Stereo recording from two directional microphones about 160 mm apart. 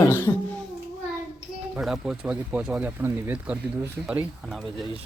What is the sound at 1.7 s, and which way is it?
Speech, 5° right (ahead or behind).